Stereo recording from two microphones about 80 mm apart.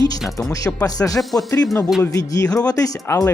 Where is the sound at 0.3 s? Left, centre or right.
Left.